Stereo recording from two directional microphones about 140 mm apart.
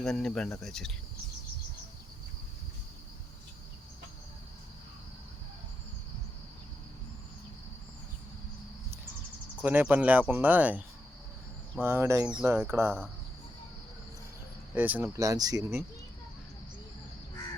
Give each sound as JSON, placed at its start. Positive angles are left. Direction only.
{"t": 0.0, "sound": "speech", "side_deg": 5}
{"t": 9.6, "sound": "speech", "side_deg": -10}
{"t": 14.8, "sound": "speech", "side_deg": -10}